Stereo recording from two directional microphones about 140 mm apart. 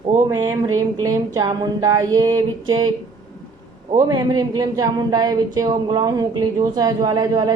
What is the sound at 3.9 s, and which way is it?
Speech, 25° right (ahead or behind).